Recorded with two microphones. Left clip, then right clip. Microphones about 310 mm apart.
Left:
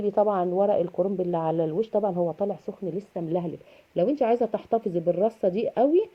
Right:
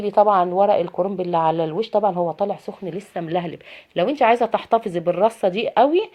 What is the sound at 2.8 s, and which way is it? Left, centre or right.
A woman's voice, right.